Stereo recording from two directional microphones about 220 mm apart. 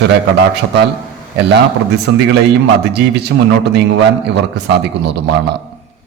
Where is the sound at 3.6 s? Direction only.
50° right (ahead or behind).